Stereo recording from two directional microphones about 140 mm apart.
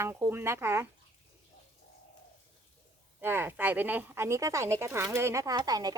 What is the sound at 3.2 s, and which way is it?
Speech, 15° right (ahead or behind).